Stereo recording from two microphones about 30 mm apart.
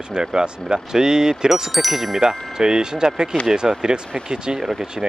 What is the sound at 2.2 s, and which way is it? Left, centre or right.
Speech, right.